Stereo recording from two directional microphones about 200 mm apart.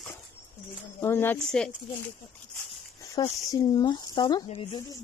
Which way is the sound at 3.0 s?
15° left (ahead or behind).